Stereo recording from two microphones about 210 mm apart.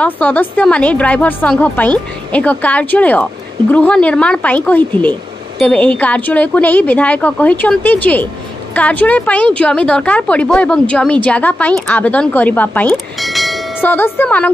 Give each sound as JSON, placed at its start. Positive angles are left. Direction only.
{"t": 0.0, "sound": "a woman's voice", "side_deg": 5}